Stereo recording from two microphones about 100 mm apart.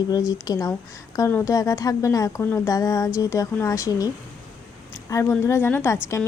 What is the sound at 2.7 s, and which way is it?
A woman's voice, 35° left (ahead or behind).